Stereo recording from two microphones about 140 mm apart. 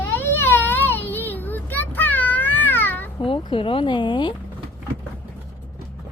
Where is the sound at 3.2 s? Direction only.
35° left (ahead or behind).